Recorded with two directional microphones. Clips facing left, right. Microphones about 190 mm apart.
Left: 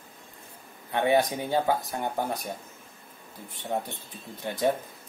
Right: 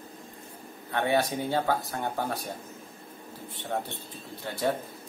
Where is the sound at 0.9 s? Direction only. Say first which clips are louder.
Left 3 dB; 20° left (ahead or behind).